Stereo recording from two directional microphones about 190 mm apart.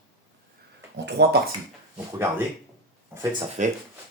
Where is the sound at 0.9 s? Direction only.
65° right (ahead or behind).